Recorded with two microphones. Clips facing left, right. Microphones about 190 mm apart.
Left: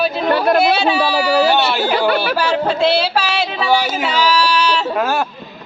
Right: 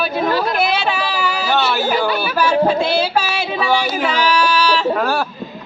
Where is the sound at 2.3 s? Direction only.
50° right (ahead or behind).